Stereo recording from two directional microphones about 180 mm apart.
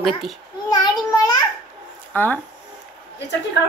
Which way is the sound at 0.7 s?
25° left (ahead or behind).